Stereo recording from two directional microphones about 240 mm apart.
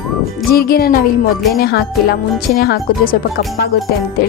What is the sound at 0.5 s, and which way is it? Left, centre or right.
Speech, left.